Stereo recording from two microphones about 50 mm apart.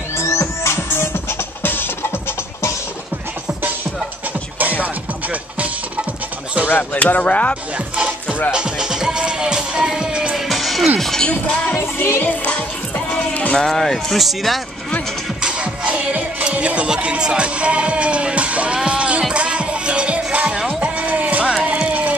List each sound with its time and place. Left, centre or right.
0.2 s music: left
1.6 s music: left
4.8 s music: right
6.8 s speech: left
7.7 s music: right
10.3 s music: centre
11.0 s speech: centre
11.2 s speech: left
11.7 s music: left
12.2 s music: left
13.6 s speech: centre
15.4 s music: centre